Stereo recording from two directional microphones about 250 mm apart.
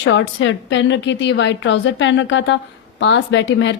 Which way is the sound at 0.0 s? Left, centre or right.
Left.